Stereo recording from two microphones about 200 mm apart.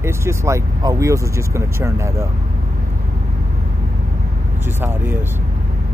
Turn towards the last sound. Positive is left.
turn(degrees=-10)  # may be behind; listen again after turning